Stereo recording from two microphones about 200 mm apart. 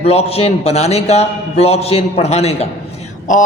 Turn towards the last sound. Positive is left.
turn(degrees=40)  # may be behind; listen again after turning